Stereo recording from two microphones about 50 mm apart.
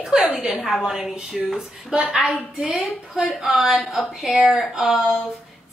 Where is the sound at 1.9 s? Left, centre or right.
Right.